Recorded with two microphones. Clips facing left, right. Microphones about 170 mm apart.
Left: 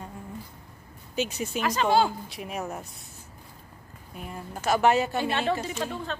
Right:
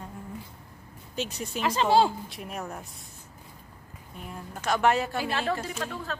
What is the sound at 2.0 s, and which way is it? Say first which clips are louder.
Speech: even; centre (ahead or behind).